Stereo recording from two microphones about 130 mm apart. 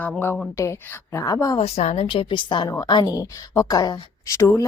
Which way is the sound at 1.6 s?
50° left (ahead or behind).